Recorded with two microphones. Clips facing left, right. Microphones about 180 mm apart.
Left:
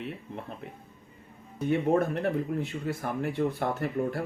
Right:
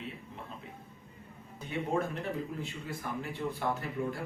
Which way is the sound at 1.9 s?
60° left (ahead or behind).